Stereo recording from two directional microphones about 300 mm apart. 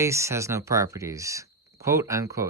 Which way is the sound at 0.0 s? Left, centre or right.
Centre.